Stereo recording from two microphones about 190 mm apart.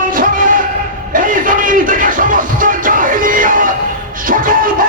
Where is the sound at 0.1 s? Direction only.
45° right (ahead or behind).